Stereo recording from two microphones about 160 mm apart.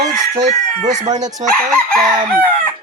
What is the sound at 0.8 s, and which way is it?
Speech, 50° right (ahead or behind).